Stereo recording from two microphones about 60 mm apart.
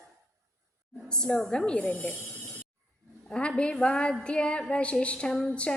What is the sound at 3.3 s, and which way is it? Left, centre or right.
A woman's voice, centre.